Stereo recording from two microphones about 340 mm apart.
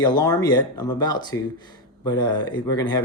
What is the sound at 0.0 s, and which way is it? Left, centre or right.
Speech, centre.